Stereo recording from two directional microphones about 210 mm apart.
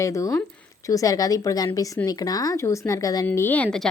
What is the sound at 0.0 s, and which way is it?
A woman's voice, 15° left (ahead or behind).